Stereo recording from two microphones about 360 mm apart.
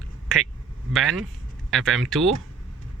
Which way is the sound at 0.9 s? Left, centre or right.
Centre.